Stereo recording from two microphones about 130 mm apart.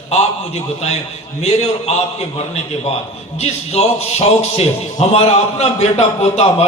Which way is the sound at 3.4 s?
55° left (ahead or behind).